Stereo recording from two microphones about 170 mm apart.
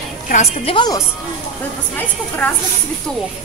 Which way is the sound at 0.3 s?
40° left (ahead or behind).